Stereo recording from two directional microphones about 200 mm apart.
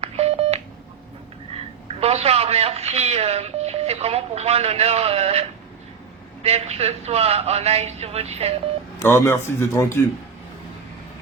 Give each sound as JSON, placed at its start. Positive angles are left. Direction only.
{"t": 0.0, "sound": "telephone dialing", "side_deg": -30}
{"t": 1.5, "sound": "a man's voice", "side_deg": -30}
{"t": 9.0, "sound": "a man's voice", "side_deg": 15}